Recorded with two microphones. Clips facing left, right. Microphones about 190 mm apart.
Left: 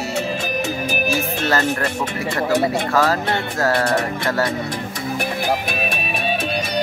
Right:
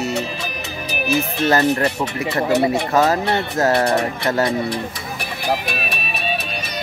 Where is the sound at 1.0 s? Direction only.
20° right (ahead or behind).